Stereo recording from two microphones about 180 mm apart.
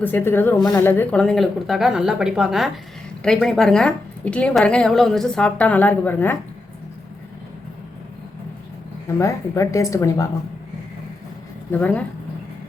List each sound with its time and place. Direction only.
0.0 s a woman's voice: 10° left (ahead or behind)
9.1 s speech: 15° left (ahead or behind)
11.7 s speech: 10° left (ahead or behind)